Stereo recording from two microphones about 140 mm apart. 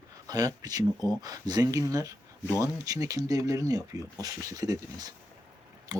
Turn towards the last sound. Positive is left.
turn(degrees=-25)  # may be behind; listen again after turning